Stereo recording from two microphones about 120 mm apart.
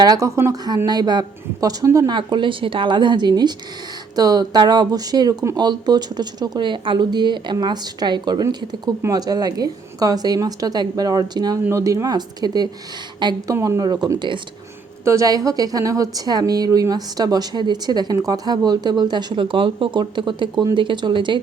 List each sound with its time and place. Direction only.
0.0 s a woman's voice: 30° right (ahead or behind)
2.1 s a woman's voice: 40° right (ahead or behind)
15.0 s a woman's voice: 25° right (ahead or behind); by 21.3 s 40° right (ahead or behind)